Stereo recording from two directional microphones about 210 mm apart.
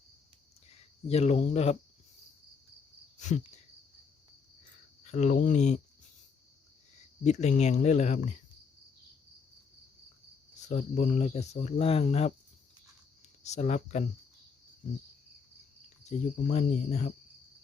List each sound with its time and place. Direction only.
0.7 s speech: 30° left (ahead or behind)
3.2 s cricket: 35° left (ahead or behind)
5.0 s speech: 35° left (ahead or behind)
6.9 s speech: 35° left (ahead or behind)
10.7 s speech: 35° left (ahead or behind)
13.4 s speech: 30° left (ahead or behind)
16.0 s speech: 30° left (ahead or behind)